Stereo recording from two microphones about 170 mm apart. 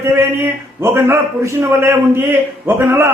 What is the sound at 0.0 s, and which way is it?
Speech, 15° right (ahead or behind).